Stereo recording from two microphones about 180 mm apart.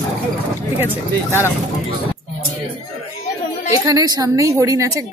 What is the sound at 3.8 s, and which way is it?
Speech, 20° right (ahead or behind).